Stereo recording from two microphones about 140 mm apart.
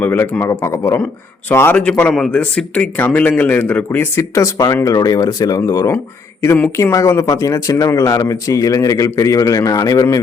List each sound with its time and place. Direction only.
0.0 s a man's voice: 15° left (ahead or behind)